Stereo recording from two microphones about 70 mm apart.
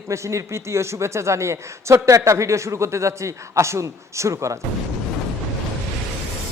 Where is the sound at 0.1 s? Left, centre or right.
Right.